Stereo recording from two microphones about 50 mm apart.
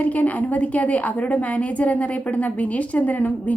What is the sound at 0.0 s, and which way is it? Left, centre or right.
A woman's voice, left.